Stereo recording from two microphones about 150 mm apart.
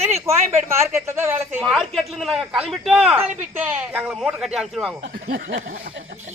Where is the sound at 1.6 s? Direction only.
Centre (ahead or behind).